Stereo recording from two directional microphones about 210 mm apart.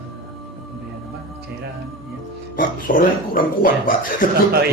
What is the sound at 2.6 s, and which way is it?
Speech, 40° left (ahead or behind).